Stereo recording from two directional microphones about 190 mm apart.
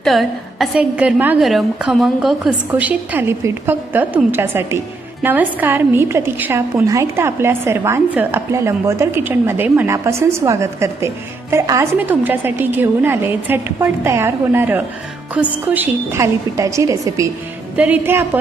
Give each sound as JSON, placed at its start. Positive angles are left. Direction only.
{"t": 0.0, "sound": "a woman's voice", "side_deg": 0}